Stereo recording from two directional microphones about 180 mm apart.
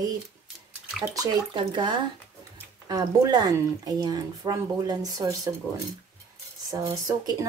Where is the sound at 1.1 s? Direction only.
25° right (ahead or behind).